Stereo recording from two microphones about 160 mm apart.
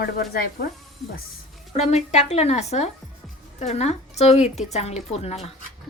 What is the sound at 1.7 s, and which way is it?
A woman's voice, 45° left (ahead or behind).